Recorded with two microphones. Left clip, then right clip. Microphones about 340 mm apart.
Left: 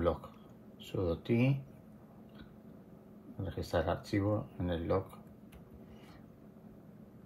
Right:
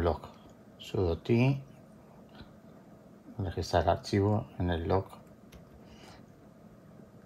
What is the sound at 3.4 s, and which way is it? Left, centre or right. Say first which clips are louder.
Speech: right 6 dB; right.